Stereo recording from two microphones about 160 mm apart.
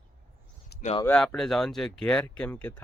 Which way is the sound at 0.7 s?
90° left.